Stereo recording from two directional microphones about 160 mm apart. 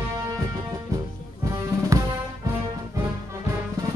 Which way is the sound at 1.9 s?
20° right (ahead or behind).